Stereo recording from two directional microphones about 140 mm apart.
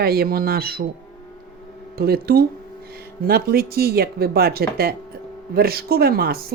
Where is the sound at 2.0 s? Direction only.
90° right.